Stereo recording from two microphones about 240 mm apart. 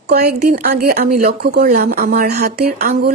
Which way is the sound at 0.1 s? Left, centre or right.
Right.